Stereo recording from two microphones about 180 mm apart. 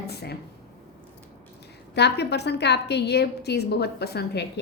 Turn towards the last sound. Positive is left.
turn(degrees=65)  # may be behind; listen again after turning